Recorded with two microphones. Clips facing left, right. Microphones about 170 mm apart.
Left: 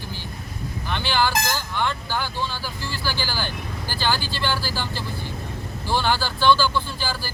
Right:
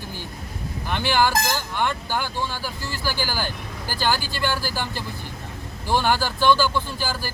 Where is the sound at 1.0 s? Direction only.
45° right (ahead or behind).